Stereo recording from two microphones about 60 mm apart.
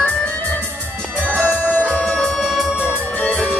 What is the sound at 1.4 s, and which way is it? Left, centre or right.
Music, left.